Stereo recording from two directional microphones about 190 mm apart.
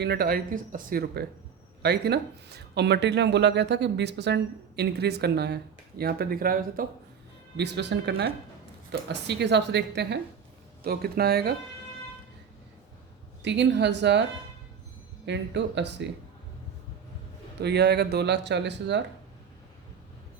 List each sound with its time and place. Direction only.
0.0 s speech: 55° right (ahead or behind)
7.5 s speech: 65° right (ahead or behind)
13.4 s a woman's voice: 65° right (ahead or behind)
15.3 s a woman's voice: 65° right (ahead or behind)
17.6 s speech: 60° right (ahead or behind)